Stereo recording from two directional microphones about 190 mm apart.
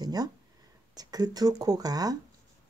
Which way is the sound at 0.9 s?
20° right (ahead or behind).